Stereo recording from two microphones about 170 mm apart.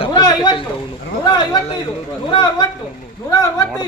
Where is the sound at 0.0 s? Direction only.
25° left (ahead or behind).